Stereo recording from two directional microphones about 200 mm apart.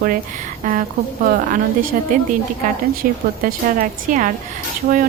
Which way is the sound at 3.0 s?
45° right (ahead or behind).